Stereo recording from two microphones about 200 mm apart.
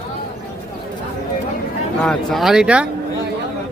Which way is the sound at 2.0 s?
5° left (ahead or behind).